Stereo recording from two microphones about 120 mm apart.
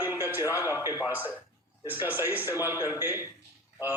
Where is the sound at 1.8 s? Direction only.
15° right (ahead or behind).